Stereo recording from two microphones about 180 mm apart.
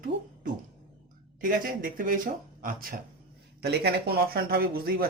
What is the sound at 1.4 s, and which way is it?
Speech, 50° right (ahead or behind).